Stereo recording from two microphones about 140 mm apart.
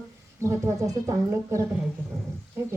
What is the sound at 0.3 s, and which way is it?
A woman's voice, 20° right (ahead or behind).